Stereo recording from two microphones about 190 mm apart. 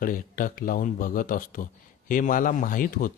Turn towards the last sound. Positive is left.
turn(degrees=45)  # may be behind; listen again after turning